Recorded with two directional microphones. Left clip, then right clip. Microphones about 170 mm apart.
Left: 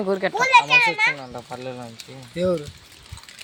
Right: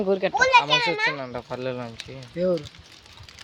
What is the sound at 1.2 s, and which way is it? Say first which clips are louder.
Speech: right 2 dB; 60° right (ahead or behind).